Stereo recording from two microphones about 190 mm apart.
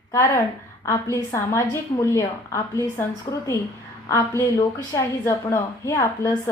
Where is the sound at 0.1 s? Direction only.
15° left (ahead or behind).